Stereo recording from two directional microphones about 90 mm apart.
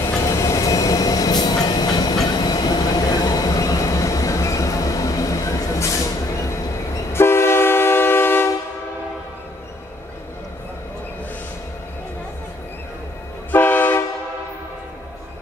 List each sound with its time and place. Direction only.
0.0 s train: 35° left (ahead or behind)
13.5 s vehicle: 20° left (ahead or behind)